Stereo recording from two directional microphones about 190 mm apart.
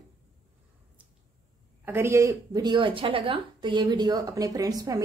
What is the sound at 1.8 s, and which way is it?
A woman's voice, 10° right (ahead or behind).